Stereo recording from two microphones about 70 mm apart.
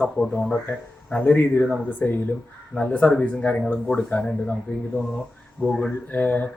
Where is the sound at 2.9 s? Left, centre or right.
Centre.